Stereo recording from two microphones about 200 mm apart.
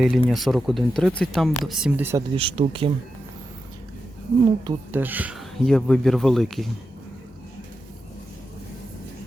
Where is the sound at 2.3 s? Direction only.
25° right (ahead or behind).